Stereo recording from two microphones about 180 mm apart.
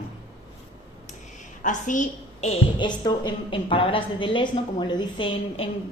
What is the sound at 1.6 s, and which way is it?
Speech, 45° left (ahead or behind).